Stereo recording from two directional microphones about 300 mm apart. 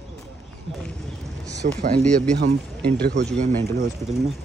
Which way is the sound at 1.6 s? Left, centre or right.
Right.